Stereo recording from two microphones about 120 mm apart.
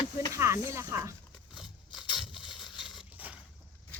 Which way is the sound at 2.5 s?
40° left (ahead or behind).